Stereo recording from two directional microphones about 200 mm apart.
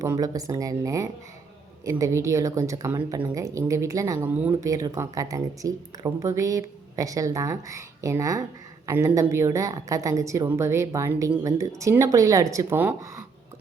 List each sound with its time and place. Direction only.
0.0 s speech: 15° right (ahead or behind)